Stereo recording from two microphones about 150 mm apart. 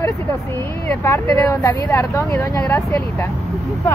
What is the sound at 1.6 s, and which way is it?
Speech, 20° left (ahead or behind).